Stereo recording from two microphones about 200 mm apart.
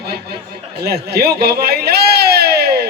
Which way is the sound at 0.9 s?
55° right (ahead or behind).